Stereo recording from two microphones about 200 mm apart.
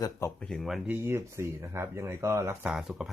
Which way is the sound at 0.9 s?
10° right (ahead or behind).